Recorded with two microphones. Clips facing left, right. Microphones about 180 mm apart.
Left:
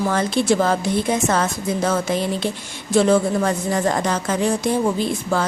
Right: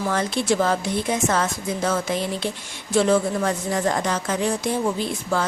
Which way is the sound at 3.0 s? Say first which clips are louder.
Left 3 dB; 40° left (ahead or behind).